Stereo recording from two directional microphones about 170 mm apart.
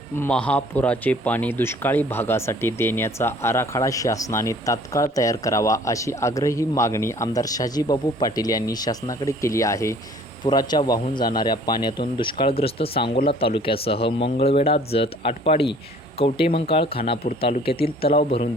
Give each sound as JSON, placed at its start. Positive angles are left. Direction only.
{"t": 0.2, "sound": "speech", "side_deg": 5}